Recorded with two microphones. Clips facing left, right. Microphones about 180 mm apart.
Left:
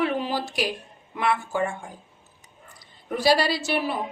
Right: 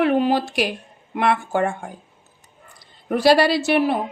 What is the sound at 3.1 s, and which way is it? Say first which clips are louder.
Speech: right 6 dB; 60° right (ahead or behind).